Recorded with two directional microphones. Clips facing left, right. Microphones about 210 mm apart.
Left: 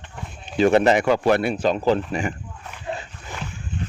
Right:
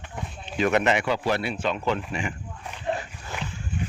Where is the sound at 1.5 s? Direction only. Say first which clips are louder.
Left 7 dB; 40° left (ahead or behind).